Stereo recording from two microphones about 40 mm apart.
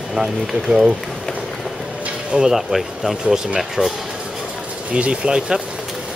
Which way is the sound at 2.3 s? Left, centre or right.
Centre.